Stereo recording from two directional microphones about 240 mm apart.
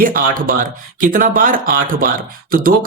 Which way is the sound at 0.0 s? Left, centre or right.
Right.